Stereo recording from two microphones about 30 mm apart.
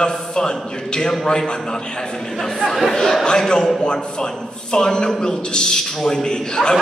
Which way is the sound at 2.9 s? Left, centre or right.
Left.